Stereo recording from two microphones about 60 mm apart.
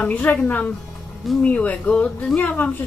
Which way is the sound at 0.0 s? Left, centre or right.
Left.